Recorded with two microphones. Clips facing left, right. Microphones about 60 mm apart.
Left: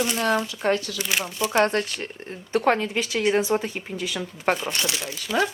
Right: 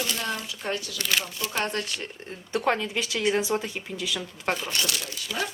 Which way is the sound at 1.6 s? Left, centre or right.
Left.